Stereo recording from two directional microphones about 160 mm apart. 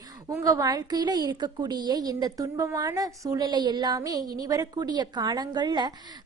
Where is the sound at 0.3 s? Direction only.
20° right (ahead or behind).